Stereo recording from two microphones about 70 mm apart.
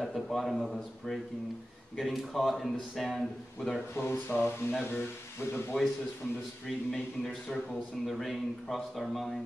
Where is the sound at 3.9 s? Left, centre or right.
Left.